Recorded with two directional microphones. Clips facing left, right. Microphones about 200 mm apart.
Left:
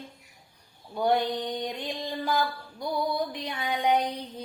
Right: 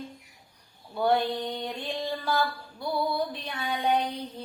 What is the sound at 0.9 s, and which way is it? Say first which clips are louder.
Mantra: even; 15° left (ahead or behind).